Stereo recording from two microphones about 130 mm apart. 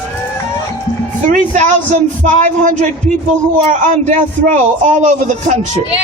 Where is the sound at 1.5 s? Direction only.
75° right (ahead or behind).